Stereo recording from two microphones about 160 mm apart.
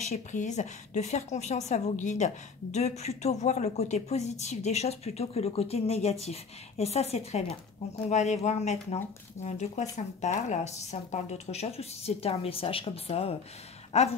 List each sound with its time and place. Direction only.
0.1 s a woman's voice: 50° left (ahead or behind)